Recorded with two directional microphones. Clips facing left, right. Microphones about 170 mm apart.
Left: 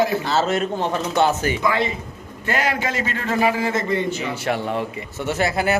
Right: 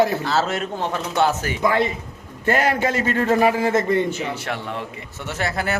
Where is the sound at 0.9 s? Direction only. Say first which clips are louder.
Left 1 dB; 10° left (ahead or behind).